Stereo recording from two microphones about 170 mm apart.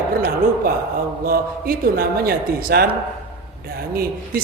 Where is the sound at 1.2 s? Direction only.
60° right (ahead or behind).